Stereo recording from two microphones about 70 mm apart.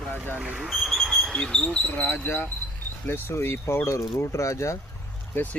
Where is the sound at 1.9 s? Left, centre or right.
Left.